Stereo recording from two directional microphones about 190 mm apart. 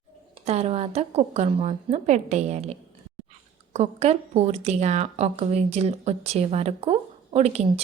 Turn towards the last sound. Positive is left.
turn(degrees=-35)  # may be behind; listen again after turning